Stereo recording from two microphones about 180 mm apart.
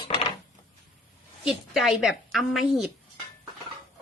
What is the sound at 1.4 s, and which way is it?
A woman's voice, centre (ahead or behind).